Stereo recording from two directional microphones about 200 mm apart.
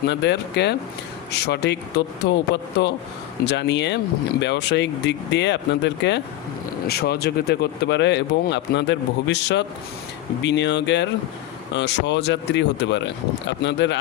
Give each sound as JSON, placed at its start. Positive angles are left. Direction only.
{"t": 0.1, "sound": "speech", "side_deg": 60}